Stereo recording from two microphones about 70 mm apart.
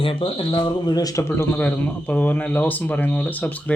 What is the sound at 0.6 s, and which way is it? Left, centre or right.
Speech, left.